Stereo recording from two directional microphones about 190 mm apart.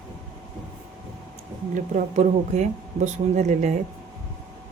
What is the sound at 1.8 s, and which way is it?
Speech, 40° right (ahead or behind).